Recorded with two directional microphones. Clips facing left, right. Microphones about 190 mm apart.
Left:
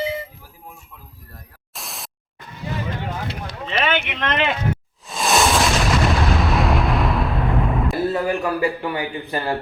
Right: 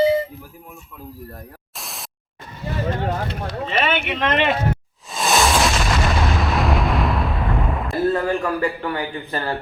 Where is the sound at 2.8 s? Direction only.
45° right (ahead or behind).